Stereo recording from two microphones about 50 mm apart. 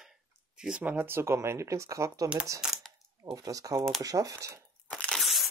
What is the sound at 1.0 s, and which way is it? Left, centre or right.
Speech, right.